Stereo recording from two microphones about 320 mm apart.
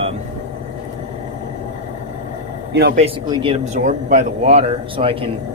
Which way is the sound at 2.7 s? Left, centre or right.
Right.